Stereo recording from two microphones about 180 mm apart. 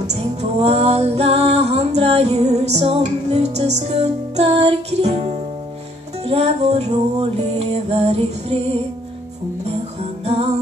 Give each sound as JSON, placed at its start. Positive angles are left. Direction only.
{"t": 0.0, "sound": "music", "side_deg": -35}